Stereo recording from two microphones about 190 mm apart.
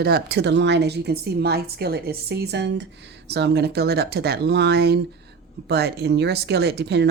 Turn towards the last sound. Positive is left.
turn(degrees=-60)  # may be behind; listen again after turning